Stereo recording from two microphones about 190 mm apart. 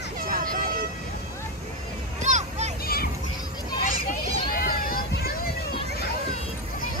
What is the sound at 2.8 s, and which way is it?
Children playing, 50° left (ahead or behind).